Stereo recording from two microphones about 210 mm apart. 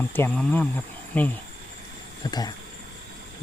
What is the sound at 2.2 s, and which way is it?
Speech, 20° left (ahead or behind).